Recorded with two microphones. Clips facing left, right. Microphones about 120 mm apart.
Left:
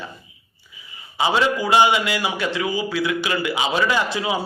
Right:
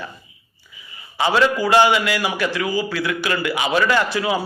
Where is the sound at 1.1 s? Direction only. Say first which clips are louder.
Right 2 dB; 20° left (ahead or behind).